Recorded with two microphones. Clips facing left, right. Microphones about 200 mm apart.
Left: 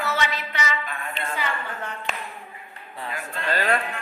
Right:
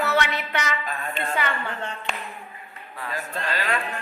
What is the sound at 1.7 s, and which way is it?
Clapping, 30° right (ahead or behind).